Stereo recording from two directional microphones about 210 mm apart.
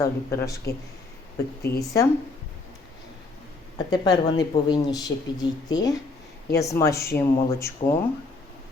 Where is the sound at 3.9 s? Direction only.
20° left (ahead or behind).